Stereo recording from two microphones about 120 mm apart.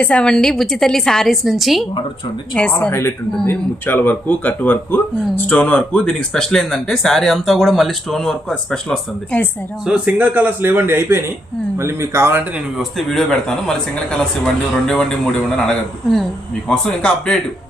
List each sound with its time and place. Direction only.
0.0 s speech: 10° left (ahead or behind)
2.6 s speech: 10° left (ahead or behind)
9.8 s speech: 10° right (ahead or behind)
12.5 s speech: centre (ahead or behind)